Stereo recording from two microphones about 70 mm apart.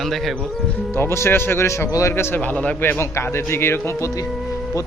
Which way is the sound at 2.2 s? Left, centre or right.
Left.